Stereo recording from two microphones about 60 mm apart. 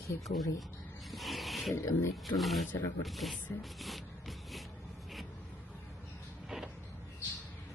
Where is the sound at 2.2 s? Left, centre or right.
Centre.